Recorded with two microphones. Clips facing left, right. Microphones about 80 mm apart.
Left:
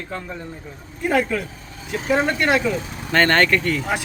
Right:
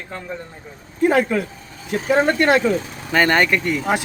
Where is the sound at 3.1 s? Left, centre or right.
Centre.